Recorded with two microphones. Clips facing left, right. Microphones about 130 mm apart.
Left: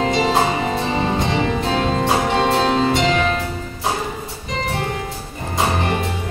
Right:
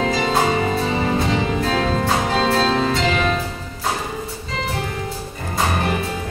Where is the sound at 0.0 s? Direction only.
25° left (ahead or behind).